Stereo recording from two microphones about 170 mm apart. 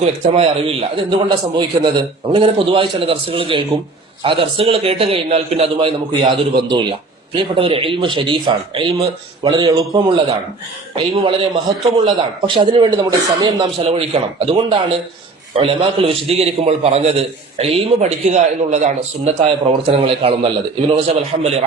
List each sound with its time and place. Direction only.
0.0 s a man's voice: 35° right (ahead or behind)